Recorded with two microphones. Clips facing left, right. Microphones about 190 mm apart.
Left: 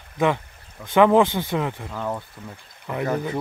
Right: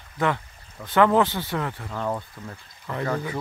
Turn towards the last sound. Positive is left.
turn(degrees=20)  # may be behind; listen again after turning